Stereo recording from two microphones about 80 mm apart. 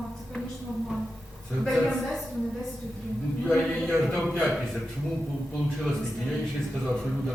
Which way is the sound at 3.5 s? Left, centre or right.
Centre.